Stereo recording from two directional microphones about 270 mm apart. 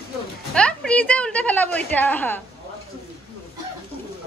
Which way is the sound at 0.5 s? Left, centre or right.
Centre.